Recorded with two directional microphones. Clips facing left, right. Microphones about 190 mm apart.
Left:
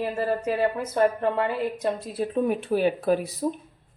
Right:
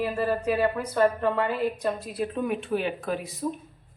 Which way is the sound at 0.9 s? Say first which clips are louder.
Left 1 dB; 20° left (ahead or behind).